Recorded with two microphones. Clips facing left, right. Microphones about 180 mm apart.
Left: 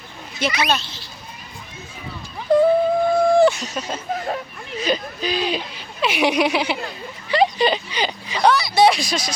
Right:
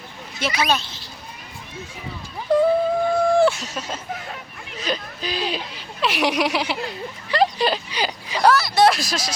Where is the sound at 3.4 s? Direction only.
5° right (ahead or behind).